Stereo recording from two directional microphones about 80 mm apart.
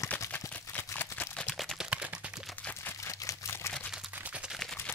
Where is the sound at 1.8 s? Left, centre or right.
Centre.